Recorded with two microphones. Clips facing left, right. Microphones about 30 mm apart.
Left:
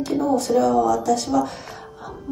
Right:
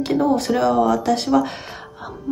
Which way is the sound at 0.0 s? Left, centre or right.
Right.